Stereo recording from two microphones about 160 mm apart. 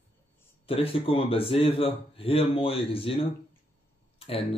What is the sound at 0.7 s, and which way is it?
Speech, 35° left (ahead or behind).